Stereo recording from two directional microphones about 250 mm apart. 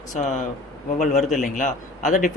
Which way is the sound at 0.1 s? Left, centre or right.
Left.